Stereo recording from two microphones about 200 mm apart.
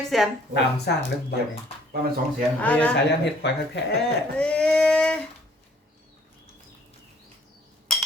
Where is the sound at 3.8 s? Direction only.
60° left (ahead or behind).